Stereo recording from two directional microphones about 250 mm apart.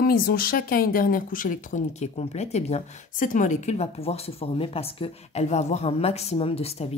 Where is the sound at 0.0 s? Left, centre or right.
Left.